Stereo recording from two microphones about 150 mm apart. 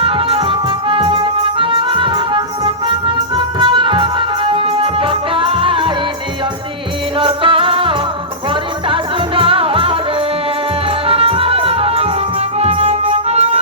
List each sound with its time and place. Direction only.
0.0 s music: 35° right (ahead or behind)
7.2 s music: 35° right (ahead or behind)